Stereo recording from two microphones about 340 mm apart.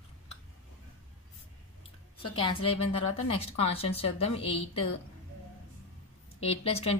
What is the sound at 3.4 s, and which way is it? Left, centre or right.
A woman's voice, centre.